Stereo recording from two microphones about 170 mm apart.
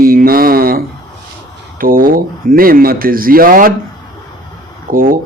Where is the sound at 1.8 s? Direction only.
55° right (ahead or behind).